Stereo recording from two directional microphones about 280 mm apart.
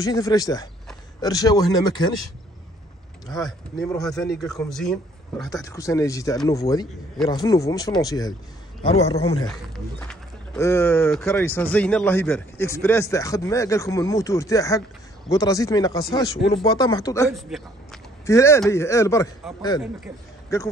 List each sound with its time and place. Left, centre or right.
0.0 s speech: centre
3.3 s a man's voice: centre; by 9.4 s left
9.5 s speech: centre
20.5 s speech: centre